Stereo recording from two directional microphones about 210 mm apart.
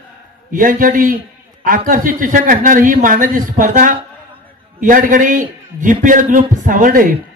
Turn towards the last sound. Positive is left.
turn(degrees=-40)  # may be behind; listen again after turning